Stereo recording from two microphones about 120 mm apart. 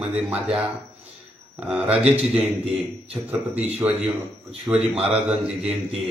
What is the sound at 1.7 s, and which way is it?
Speech, 10° right (ahead or behind).